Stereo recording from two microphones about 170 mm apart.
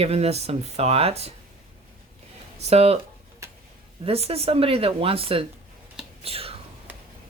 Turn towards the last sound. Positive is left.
turn(degrees=-35)  # may be behind; listen again after turning